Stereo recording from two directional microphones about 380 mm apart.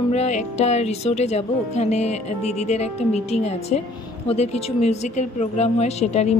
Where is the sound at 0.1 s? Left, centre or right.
Centre.